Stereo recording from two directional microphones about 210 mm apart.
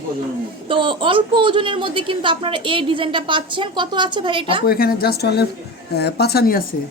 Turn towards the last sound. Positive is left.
turn(degrees=45)  # may be behind; listen again after turning